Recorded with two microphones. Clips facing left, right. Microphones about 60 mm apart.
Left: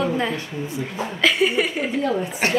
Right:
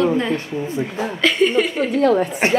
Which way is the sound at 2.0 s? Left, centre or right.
Right.